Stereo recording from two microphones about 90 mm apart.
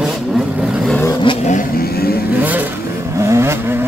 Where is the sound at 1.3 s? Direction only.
70° left (ahead or behind).